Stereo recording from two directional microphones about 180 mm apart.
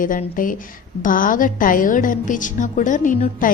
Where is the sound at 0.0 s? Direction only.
50° left (ahead or behind).